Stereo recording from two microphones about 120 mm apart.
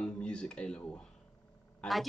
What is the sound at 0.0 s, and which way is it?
Speech, 5° left (ahead or behind).